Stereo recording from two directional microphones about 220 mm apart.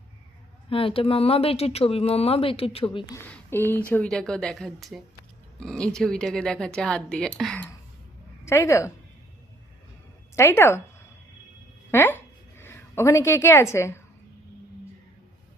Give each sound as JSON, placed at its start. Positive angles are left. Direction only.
{"t": 0.7, "sound": "speech", "side_deg": 25}
{"t": 3.2, "sound": "a woman's voice", "side_deg": 10}
{"t": 10.3, "sound": "a woman's voice", "side_deg": 10}
{"t": 11.9, "sound": "a woman's voice", "side_deg": 10}